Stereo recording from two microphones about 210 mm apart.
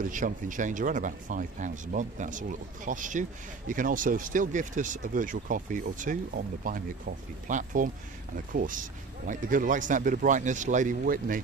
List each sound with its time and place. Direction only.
0.0 s speech: 40° right (ahead or behind)